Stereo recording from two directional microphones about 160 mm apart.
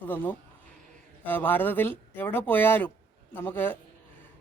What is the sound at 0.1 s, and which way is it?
A man's voice, 10° left (ahead or behind).